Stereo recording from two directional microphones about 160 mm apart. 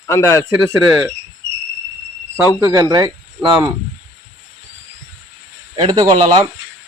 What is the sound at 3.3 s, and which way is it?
Speech, 10° right (ahead or behind).